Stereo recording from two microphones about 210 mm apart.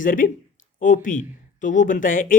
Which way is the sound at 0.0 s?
40° left (ahead or behind).